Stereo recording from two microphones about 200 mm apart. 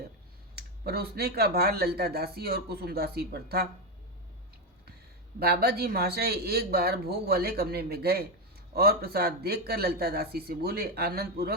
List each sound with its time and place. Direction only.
0.5 s speech: 50° right (ahead or behind)
5.4 s speech: 50° right (ahead or behind)